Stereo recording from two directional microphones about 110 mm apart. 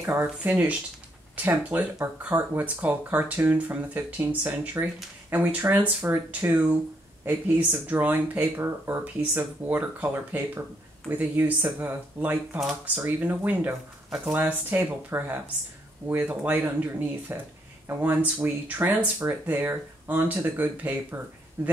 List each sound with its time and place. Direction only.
0.0 s speech: 15° right (ahead or behind)